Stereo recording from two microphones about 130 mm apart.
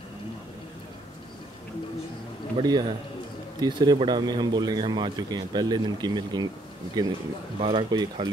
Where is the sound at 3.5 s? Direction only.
35° right (ahead or behind).